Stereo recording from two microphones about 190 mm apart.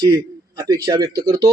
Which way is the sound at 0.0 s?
20° right (ahead or behind).